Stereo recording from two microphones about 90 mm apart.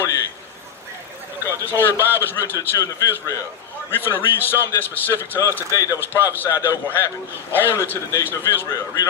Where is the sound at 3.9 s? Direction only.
25° left (ahead or behind).